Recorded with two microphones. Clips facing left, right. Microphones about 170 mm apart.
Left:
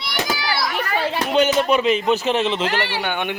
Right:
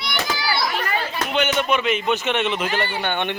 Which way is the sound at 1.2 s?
35° left (ahead or behind).